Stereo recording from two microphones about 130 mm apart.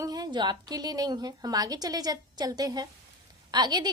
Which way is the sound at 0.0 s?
30° right (ahead or behind).